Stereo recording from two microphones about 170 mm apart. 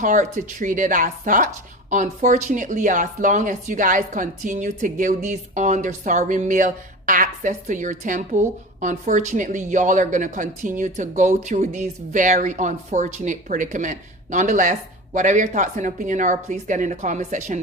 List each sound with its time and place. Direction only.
0.0 s speech: 45° right (ahead or behind)